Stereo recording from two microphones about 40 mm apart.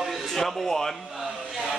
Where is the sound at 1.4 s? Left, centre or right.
Centre.